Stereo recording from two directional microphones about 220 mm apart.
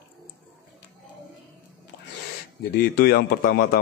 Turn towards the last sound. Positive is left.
turn(degrees=45)  # may be behind; listen again after turning